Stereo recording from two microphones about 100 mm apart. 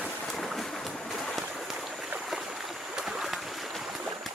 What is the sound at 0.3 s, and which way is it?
Boat, centre (ahead or behind).